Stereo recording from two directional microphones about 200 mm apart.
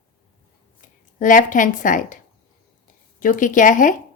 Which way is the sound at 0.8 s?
40° left (ahead or behind).